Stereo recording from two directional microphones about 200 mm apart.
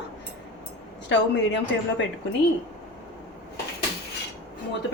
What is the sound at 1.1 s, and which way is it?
Speech, 65° left (ahead or behind).